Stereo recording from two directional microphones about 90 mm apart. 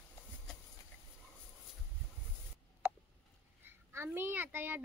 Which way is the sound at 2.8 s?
20° right (ahead or behind).